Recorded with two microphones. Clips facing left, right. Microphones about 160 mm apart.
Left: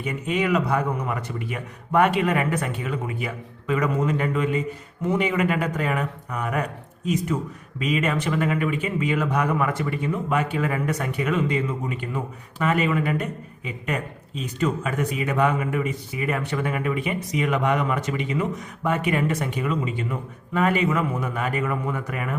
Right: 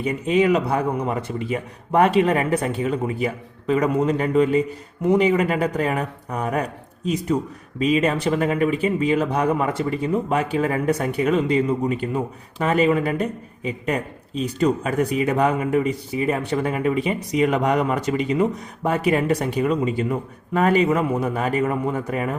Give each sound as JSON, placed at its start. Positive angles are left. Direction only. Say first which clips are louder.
{"t": 0.0, "sound": "speech", "louder": "right 6 dB", "side_deg": -30}